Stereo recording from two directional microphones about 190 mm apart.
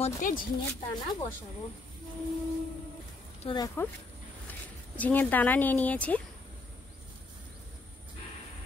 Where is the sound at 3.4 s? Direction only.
25° left (ahead or behind).